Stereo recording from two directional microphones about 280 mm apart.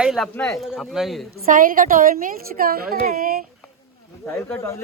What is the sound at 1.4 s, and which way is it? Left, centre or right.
A woman's voice, right.